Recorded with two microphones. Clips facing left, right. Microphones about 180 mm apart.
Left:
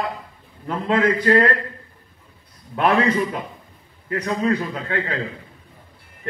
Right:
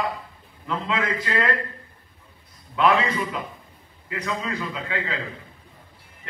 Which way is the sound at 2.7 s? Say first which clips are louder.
Left 2 dB; 50° left (ahead or behind).